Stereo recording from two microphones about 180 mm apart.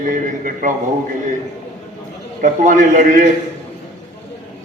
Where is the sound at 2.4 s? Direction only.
45° right (ahead or behind).